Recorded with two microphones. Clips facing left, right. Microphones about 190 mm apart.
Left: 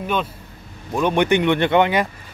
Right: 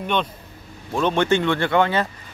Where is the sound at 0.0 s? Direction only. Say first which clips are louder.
Even; 5° left (ahead or behind).